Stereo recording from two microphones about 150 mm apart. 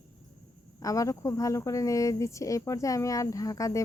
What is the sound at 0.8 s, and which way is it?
Speech, 20° left (ahead or behind).